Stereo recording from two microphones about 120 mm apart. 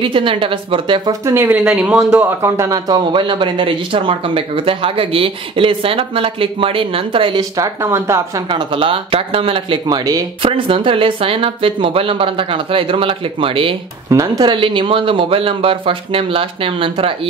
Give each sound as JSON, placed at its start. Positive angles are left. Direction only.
{"t": 0.0, "sound": "speech", "side_deg": -45}
{"t": 1.2, "sound": "speech", "side_deg": -20}
{"t": 1.6, "sound": "speech", "side_deg": -5}
{"t": 2.4, "sound": "speech", "side_deg": -25}
{"t": 3.1, "sound": "speech", "side_deg": -40}
{"t": 7.5, "sound": "speech", "side_deg": -25}
{"t": 8.5, "sound": "speech", "side_deg": -45}
{"t": 14.1, "sound": "speech", "side_deg": -30}